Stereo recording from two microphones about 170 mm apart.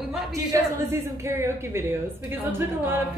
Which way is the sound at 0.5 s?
20° right (ahead or behind).